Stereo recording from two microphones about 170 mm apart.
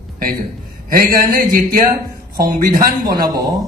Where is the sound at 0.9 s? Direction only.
55° right (ahead or behind).